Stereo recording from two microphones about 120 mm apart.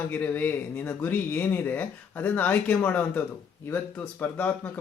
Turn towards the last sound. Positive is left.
turn(degrees=15)  # may be behind; listen again after turning